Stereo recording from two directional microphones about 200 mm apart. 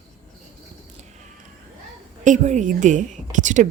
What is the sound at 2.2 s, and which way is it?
Speech, 35° right (ahead or behind).